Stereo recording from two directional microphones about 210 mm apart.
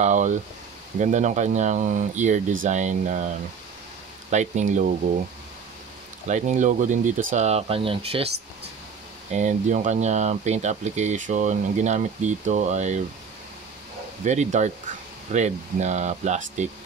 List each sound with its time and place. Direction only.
0.0 s speech: 35° right (ahead or behind)
4.3 s speech: 35° right (ahead or behind)
6.2 s speech: 35° right (ahead or behind)
9.3 s speech: 35° right (ahead or behind)
14.2 s speech: 35° right (ahead or behind)